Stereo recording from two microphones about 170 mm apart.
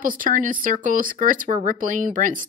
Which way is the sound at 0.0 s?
55° right (ahead or behind).